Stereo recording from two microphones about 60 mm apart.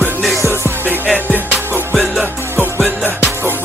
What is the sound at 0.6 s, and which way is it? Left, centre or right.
Music, right.